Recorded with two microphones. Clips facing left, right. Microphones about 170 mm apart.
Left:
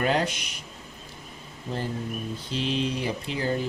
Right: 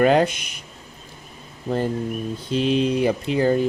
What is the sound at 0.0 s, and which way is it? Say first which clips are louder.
Speech: right 8 dB; 55° right (ahead or behind).